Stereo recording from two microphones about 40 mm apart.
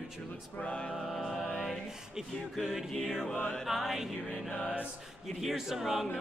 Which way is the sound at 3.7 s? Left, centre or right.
Centre.